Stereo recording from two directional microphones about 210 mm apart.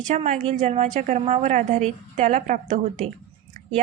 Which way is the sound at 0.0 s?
35° right (ahead or behind).